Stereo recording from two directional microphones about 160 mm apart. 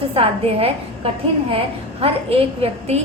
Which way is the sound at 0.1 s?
35° right (ahead or behind).